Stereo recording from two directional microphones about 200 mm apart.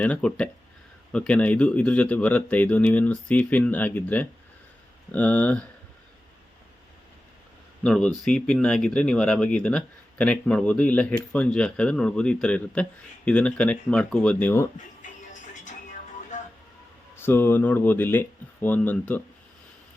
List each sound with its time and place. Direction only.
0.0 s speech: 5° left (ahead or behind)
7.9 s speech: 5° left (ahead or behind)
15.0 s music: 40° left (ahead or behind)
16.3 s vehicle: 40° left (ahead or behind)
17.2 s speech: 10° left (ahead or behind)